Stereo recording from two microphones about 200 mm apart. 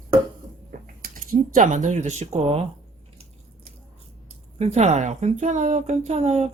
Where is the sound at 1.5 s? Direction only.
40° right (ahead or behind).